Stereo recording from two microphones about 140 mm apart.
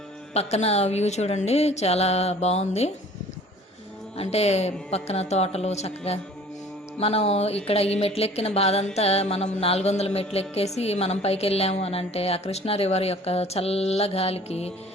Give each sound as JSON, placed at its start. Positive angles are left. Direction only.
{"t": 0.3, "sound": "a woman's voice", "side_deg": 50}
{"t": 4.2, "sound": "a woman's voice", "side_deg": 50}
{"t": 7.0, "sound": "a woman's voice", "side_deg": 45}